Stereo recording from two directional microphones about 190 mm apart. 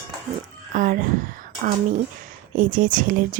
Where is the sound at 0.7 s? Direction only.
45° right (ahead or behind).